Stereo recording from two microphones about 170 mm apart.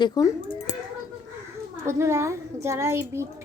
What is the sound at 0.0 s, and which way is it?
Speech, 20° left (ahead or behind).